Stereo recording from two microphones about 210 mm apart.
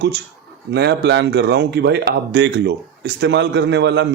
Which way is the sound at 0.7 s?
50° right (ahead or behind).